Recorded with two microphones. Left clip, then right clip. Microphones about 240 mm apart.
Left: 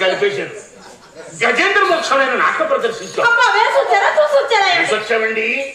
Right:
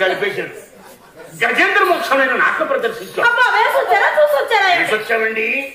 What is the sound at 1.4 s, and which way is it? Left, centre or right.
Speech, right.